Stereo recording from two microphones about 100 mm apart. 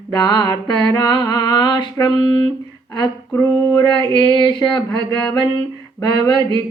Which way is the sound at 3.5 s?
30° left (ahead or behind).